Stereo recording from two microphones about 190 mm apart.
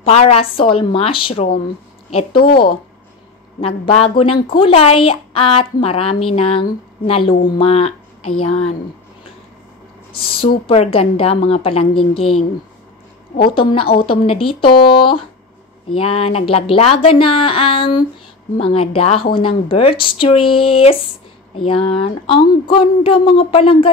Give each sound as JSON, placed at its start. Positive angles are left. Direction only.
{"t": 0.0, "sound": "a woman's voice", "side_deg": 30}
{"t": 2.4, "sound": "speech", "side_deg": 55}
{"t": 3.6, "sound": "a woman's voice", "side_deg": 30}
{"t": 10.7, "sound": "a woman's voice", "side_deg": 30}
{"t": 13.6, "sound": "speech", "side_deg": 25}